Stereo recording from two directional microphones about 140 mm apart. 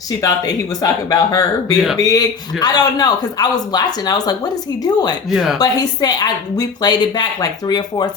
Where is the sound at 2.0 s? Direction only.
25° left (ahead or behind).